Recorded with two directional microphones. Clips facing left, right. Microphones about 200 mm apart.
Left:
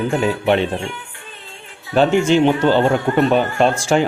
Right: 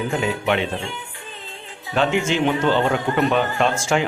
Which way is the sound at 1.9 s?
40° left (ahead or behind).